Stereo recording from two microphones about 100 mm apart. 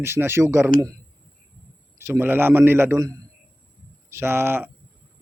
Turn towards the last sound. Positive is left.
turn(degrees=-25)  # may be behind; listen again after turning